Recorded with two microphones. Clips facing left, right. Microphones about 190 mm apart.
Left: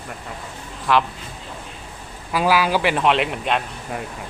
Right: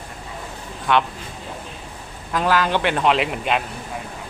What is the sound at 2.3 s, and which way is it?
A man's voice, 10° left (ahead or behind).